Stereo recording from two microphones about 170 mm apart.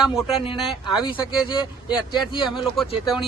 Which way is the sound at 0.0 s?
Centre (ahead or behind).